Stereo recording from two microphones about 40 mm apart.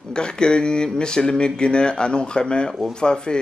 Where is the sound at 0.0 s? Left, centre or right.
Left.